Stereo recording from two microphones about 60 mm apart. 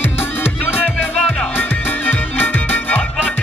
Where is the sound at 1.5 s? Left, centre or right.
Left.